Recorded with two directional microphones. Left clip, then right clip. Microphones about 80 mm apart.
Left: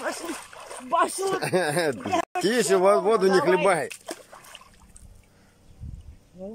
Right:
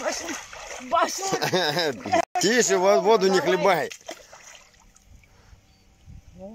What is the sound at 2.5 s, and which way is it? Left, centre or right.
Speech, centre.